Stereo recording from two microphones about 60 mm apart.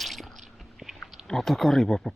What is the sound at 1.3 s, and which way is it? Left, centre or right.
Speech, centre.